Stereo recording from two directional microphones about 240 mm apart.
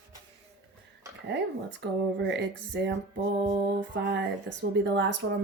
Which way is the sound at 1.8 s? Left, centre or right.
Right.